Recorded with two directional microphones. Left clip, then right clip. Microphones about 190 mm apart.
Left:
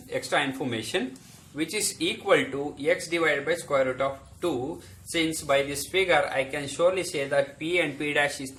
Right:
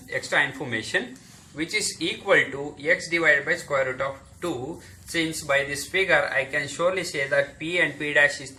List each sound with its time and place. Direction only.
0.1 s speech: 55° left (ahead or behind)